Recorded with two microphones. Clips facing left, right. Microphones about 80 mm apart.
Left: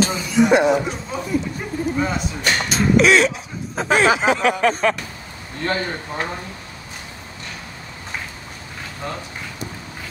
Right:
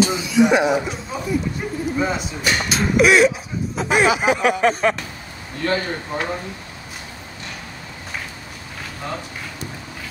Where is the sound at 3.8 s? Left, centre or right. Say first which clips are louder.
Left 3 dB; left.